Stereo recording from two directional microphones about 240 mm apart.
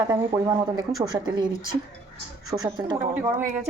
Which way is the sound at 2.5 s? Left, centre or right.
Centre.